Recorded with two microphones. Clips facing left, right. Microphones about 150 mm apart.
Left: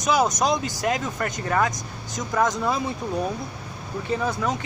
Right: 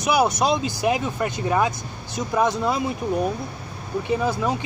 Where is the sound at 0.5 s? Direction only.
20° right (ahead or behind).